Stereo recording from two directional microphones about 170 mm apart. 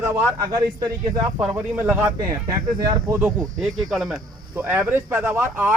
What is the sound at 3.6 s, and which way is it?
Speech, centre (ahead or behind).